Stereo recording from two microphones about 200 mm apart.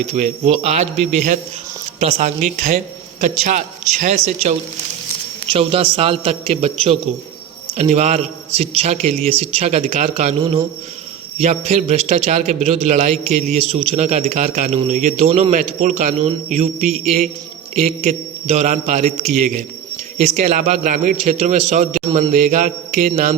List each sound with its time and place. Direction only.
0.1 s a man's voice: 30° right (ahead or behind)